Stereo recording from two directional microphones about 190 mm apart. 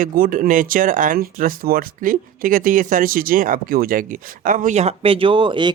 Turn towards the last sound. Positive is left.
turn(degrees=-25)  # may be behind; listen again after turning